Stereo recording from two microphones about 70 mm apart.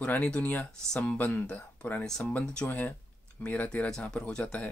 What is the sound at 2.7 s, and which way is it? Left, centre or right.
Speech, left.